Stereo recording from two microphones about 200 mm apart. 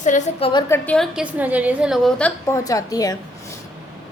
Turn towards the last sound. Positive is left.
turn(degrees=15)  # may be behind; listen again after turning